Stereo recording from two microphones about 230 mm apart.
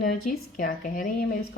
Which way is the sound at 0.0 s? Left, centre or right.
Left.